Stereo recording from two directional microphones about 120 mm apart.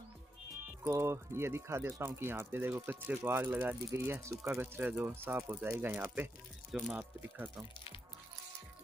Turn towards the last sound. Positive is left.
turn(degrees=-20)  # may be behind; listen again after turning